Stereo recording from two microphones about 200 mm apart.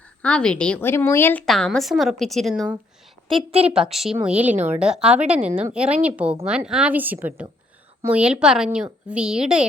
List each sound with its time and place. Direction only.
0.2 s a woman's voice: 5° left (ahead or behind)
3.3 s a woman's voice: 30° right (ahead or behind)
3.7 s a woman's voice: centre (ahead or behind)